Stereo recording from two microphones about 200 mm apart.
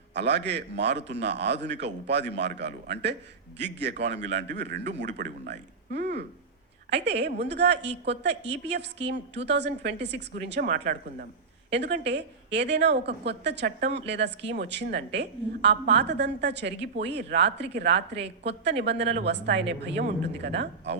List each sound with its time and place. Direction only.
0.1 s speech: 60° right (ahead or behind)
11.7 s speech: 60° right (ahead or behind)